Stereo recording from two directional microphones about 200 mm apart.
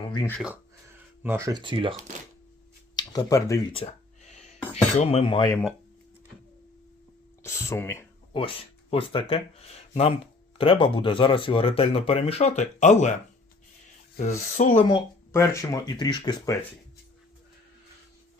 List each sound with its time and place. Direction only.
0.0 s a sound: 25° left (ahead or behind)
1.2 s speech: 15° right (ahead or behind)
2.9 s speech: 20° left (ahead or behind)
3.7 s a sound: 30° left (ahead or behind)
7.4 s speech: 15° left (ahead or behind)
8.3 s speech: 25° left (ahead or behind)
14.3 s speech: 35° left (ahead or behind)
14.8 s speech: 20° left (ahead or behind)